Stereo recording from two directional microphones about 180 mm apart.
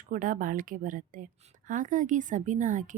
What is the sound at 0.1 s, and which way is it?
A woman's voice, 45° right (ahead or behind).